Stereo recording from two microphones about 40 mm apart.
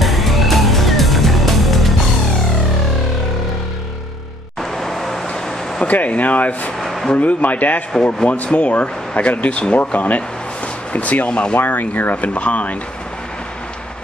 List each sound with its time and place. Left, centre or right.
0.0 s music: centre
4.7 s vehicle: centre
5.9 s speech: left
6.8 s a sound: centre
7.2 s speech: left
7.9 s speech: centre
8.5 s speech: left
11.2 s speech: left
11.6 s speech: left
12.4 s speech: left